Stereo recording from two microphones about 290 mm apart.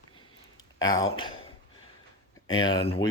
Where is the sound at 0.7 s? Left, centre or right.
Centre.